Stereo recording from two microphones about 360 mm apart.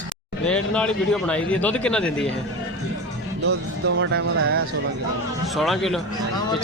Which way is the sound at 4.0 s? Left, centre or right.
Right.